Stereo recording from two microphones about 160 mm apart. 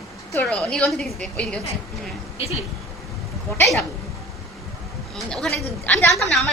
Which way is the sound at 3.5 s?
15° left (ahead or behind).